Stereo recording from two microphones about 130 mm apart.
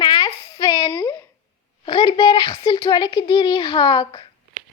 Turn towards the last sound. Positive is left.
turn(degrees=40)  # may be behind; listen again after turning